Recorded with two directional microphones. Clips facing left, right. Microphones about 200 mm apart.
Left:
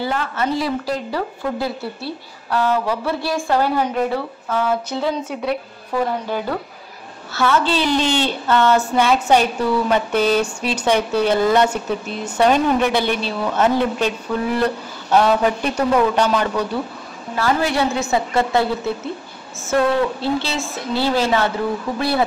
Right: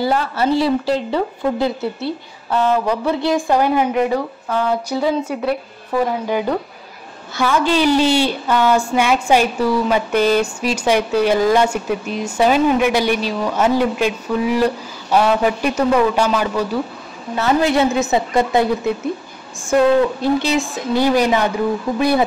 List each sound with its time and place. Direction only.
0.0 s a woman's voice: 35° right (ahead or behind); by 5.6 s 5° right (ahead or behind)
7.3 s a woman's voice: 15° right (ahead or behind)
17.4 s a woman's voice: 20° right (ahead or behind)
19.7 s a woman's voice: 15° right (ahead or behind)